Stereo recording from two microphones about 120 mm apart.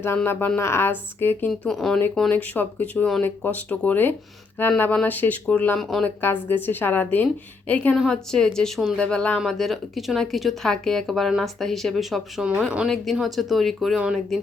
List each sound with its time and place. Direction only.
0.0 s speech: 20° left (ahead or behind)
1.5 s speech: 5° left (ahead or behind)
2.3 s speech: 15° left (ahead or behind)
6.2 s speech: 15° left (ahead or behind); by 14.3 s 5° right (ahead or behind)